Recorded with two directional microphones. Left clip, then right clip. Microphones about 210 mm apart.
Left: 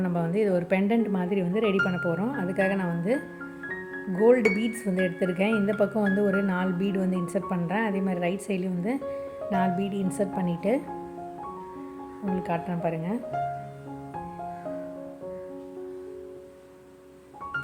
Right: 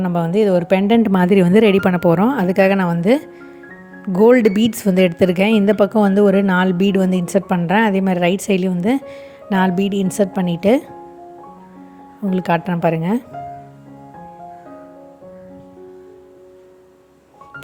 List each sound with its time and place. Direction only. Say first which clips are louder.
0.0 s a woman's voice: right 10 dB; 35° right (ahead or behind)
12.3 s speech: right 11 dB; 45° right (ahead or behind)